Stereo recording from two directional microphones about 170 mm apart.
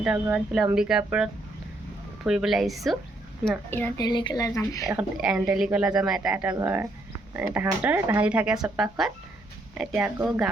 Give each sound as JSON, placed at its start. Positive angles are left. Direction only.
{"t": 0.0, "sound": "speech", "side_deg": -5}
{"t": 3.7, "sound": "a woman's voice", "side_deg": 15}
{"t": 4.0, "sound": "speech", "side_deg": 25}
{"t": 4.9, "sound": "speech", "side_deg": -5}